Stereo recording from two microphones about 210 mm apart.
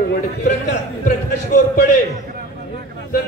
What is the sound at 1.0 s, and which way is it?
Speech, 35° left (ahead or behind).